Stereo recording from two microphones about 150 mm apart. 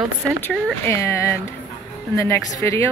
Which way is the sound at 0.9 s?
15° left (ahead or behind).